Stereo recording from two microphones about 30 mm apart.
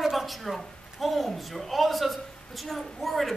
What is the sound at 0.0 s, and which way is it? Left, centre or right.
A woman's voice, centre.